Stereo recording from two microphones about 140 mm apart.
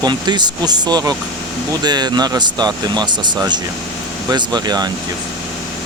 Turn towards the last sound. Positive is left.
turn(degrees=-30)  # may be behind; listen again after turning